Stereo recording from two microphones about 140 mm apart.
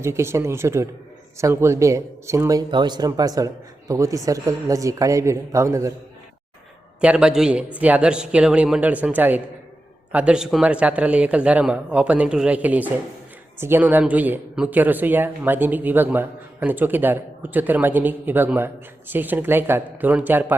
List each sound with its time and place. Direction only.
0.0 s speech: 20° right (ahead or behind)
7.0 s speech: 5° right (ahead or behind)